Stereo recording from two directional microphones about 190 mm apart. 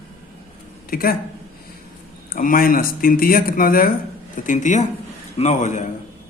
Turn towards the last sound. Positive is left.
turn(degrees=40)  # may be behind; listen again after turning